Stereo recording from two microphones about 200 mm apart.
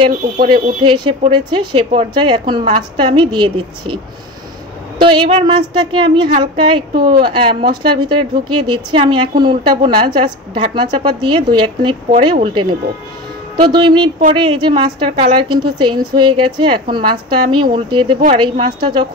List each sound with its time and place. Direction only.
0.4 s a woman's voice: 25° right (ahead or behind)
5.0 s a woman's voice: 25° right (ahead or behind)